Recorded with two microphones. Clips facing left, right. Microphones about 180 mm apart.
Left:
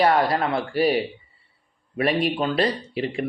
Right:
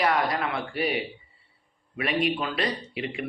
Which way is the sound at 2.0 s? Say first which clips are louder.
Left 4 dB; 35° left (ahead or behind).